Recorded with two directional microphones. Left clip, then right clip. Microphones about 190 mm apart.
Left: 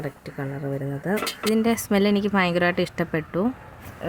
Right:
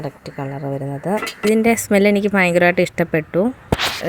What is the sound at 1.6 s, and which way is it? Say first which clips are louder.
A woman's voice: right 7 dB; 20° right (ahead or behind).